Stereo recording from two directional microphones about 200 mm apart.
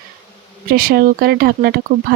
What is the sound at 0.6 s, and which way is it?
Speech, 50° right (ahead or behind).